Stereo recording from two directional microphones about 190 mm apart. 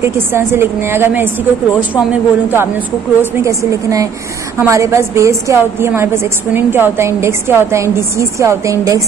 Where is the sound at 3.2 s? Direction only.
15° right (ahead or behind).